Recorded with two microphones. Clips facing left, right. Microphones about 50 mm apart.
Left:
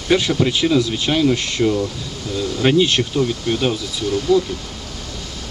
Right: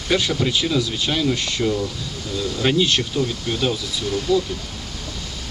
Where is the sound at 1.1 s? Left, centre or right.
Centre.